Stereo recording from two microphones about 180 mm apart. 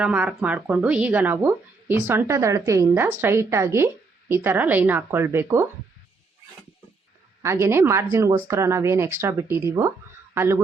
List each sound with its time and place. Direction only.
0.0 s speech: 10° right (ahead or behind)
7.4 s a man's voice: 15° right (ahead or behind)